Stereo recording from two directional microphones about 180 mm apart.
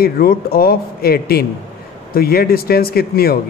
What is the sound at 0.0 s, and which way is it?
Speech, 55° left (ahead or behind).